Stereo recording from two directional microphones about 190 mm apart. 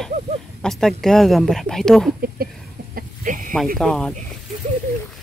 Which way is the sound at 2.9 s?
45° right (ahead or behind).